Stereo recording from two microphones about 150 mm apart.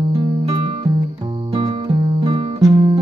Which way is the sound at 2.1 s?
35° right (ahead or behind).